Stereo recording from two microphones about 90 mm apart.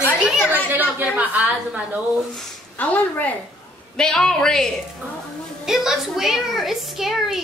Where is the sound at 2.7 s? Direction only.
20° left (ahead or behind).